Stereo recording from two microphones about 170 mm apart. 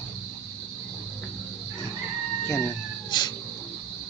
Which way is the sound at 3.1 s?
25° left (ahead or behind).